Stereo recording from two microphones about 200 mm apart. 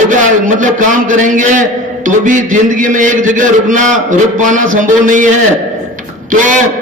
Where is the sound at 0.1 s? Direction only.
40° right (ahead or behind).